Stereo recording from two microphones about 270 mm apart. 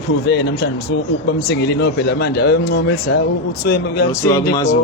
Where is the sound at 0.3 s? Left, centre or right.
Left.